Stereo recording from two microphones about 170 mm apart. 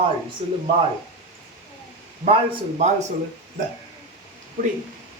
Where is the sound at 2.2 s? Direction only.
35° right (ahead or behind).